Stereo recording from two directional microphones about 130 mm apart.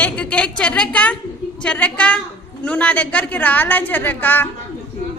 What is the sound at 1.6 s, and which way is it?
A woman's voice, 10° left (ahead or behind).